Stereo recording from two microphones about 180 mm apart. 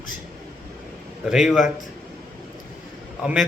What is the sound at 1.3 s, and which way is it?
Speech, centre (ahead or behind).